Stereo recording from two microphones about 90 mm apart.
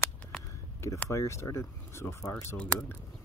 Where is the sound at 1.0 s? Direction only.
35° left (ahead or behind).